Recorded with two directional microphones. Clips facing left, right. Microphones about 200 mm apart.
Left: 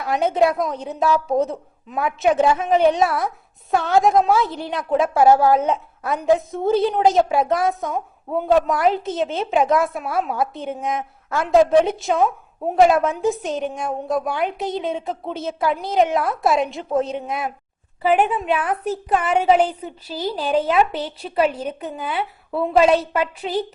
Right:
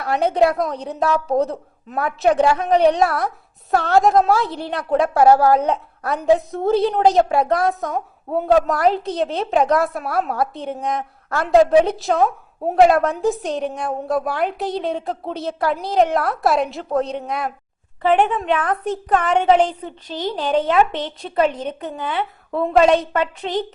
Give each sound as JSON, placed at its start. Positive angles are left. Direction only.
{"t": 0.0, "sound": "a woman's voice", "side_deg": 0}